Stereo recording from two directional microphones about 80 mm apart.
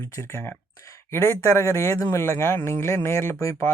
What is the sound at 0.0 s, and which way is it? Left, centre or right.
Speech, left.